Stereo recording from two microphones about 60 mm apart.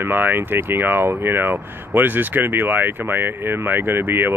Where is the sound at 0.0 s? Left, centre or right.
Right.